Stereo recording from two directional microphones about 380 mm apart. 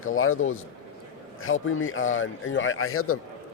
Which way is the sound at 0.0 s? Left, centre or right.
Left.